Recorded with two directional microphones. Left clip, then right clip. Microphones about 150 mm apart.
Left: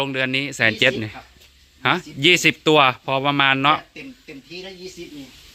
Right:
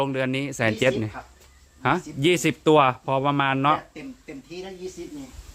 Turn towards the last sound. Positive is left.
turn(degrees=0)  # may be behind; listen again after turning